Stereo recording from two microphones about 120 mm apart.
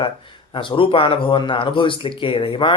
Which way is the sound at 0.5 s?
45° left (ahead or behind).